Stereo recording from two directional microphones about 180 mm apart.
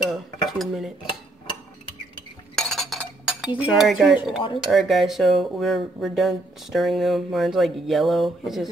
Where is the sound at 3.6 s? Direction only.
Centre (ahead or behind).